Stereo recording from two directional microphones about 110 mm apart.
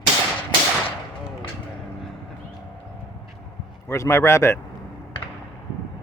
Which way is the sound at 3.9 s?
25° left (ahead or behind).